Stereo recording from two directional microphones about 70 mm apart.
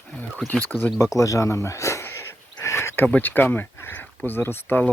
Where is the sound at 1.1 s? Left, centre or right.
Left.